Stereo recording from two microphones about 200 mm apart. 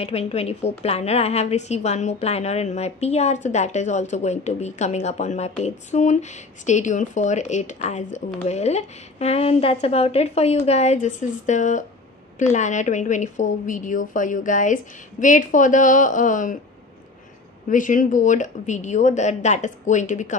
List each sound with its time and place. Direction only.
0.0 s speech: 30° left (ahead or behind)
17.6 s speech: 40° left (ahead or behind)